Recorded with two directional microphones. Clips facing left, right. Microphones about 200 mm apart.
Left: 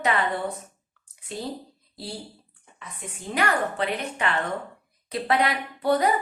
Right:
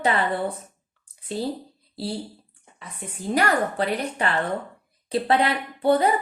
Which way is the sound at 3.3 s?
40° right (ahead or behind).